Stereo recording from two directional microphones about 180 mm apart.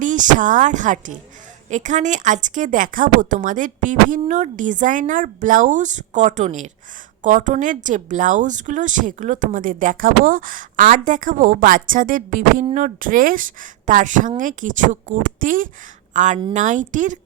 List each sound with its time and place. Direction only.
0.0 s a woman's voice: 45° right (ahead or behind)